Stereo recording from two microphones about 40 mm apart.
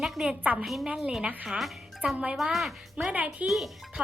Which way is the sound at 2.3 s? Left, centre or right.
Centre.